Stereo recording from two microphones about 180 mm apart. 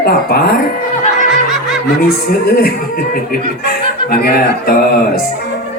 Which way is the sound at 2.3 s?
60° left (ahead or behind).